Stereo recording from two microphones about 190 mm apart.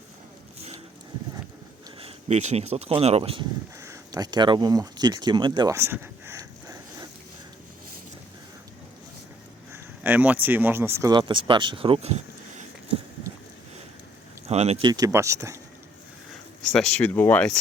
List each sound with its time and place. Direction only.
2.0 s speech: 30° right (ahead or behind)
3.8 s a sound: 15° right (ahead or behind)
9.7 s speech: 10° right (ahead or behind); by 13.0 s 35° right (ahead or behind)
14.4 s speech: 35° right (ahead or behind)
14.8 s speech: 20° right (ahead or behind)
16.7 s speech: 5° left (ahead or behind)